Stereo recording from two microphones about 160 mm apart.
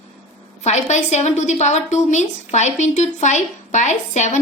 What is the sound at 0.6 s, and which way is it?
A woman's voice, 45° left (ahead or behind).